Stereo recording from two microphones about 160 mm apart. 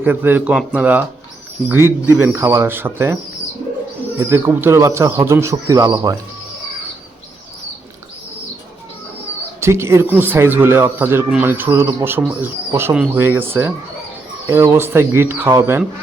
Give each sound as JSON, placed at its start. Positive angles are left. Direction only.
{"t": 0.0, "sound": "speech", "side_deg": -10}
{"t": 4.2, "sound": "a man's voice", "side_deg": -15}
{"t": 9.6, "sound": "speech", "side_deg": -15}